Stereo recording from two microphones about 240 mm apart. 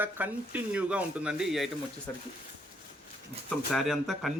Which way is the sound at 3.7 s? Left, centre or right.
Centre.